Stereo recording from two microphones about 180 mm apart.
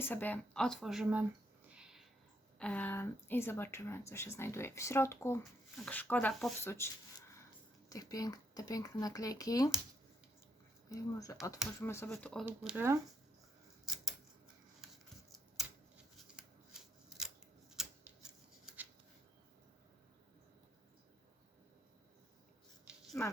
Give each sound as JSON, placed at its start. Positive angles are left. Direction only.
{"t": 0.0, "sound": "speech", "side_deg": 10}
{"t": 2.6, "sound": "speech", "side_deg": 5}
{"t": 10.8, "sound": "speech", "side_deg": 20}
{"t": 12.0, "sound": "speech", "side_deg": 5}
{"t": 12.5, "sound": "speech", "side_deg": -10}
{"t": 14.8, "sound": "scissors", "side_deg": 0}
{"t": 16.1, "sound": "scissors", "side_deg": -5}
{"t": 22.9, "sound": "a sound", "side_deg": 0}